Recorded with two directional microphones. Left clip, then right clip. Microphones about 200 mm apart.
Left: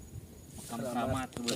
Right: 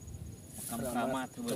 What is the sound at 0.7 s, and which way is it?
Speech, 5° right (ahead or behind).